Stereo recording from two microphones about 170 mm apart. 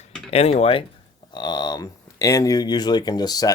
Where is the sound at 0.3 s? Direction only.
40° left (ahead or behind).